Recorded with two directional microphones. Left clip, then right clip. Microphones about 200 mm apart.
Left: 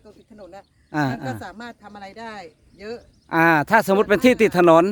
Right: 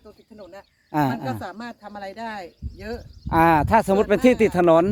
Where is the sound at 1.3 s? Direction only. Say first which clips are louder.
Right 1 dB; 55° left (ahead or behind).